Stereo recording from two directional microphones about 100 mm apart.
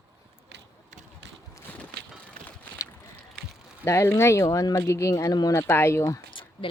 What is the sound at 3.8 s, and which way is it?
Speech, 30° left (ahead or behind).